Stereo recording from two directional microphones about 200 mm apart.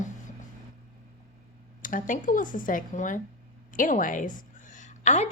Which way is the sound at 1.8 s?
40° left (ahead or behind).